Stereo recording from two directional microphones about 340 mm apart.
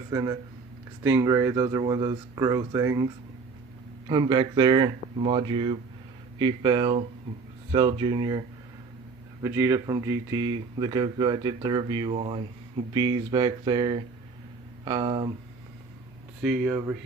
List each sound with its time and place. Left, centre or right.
0.1 s speech: centre
9.4 s speech: centre
16.4 s speech: centre